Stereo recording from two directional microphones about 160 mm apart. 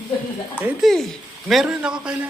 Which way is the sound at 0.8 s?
Centre (ahead or behind).